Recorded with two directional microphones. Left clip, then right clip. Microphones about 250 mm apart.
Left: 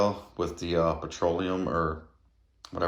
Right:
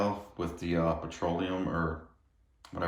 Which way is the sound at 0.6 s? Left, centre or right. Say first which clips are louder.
Left 4 dB; centre.